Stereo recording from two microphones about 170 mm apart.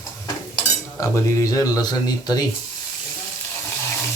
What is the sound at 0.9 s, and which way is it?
Speech, 20° left (ahead or behind).